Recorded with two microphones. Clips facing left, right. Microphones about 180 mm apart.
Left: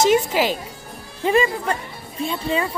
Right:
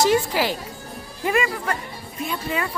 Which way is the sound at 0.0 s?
20° left (ahead or behind).